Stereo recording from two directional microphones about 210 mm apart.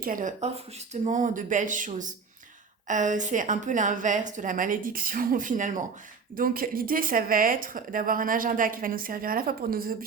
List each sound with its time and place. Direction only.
0.0 s a woman's voice: 40° right (ahead or behind)